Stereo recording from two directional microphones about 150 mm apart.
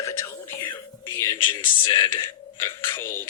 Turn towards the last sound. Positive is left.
turn(degrees=15)  # may be behind; listen again after turning